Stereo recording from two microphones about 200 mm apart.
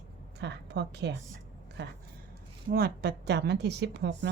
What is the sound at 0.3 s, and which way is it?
A woman's voice, 60° right (ahead or behind).